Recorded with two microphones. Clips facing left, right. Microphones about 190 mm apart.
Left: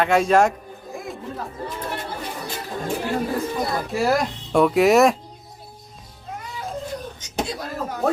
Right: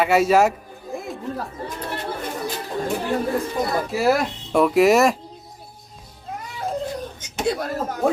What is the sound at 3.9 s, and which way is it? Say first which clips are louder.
Speech: right 1 dB; 5° right (ahead or behind).